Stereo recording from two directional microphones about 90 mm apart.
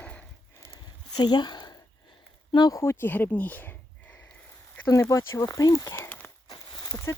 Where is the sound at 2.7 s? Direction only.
30° left (ahead or behind).